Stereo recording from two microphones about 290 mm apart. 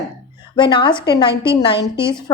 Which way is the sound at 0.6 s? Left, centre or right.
Centre.